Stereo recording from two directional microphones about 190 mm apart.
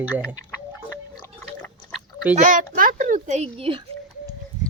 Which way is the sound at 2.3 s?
40° right (ahead or behind).